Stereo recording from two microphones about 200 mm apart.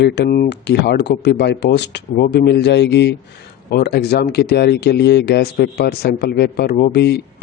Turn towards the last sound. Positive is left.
turn(degrees=55)  # may be behind; listen again after turning